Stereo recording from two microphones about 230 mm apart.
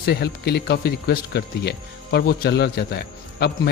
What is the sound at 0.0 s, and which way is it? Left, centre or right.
Speech, left.